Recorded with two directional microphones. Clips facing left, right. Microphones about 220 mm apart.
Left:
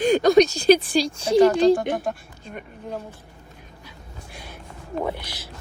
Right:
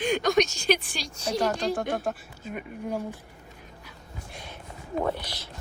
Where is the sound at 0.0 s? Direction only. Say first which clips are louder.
Left 8 dB; 35° left (ahead or behind).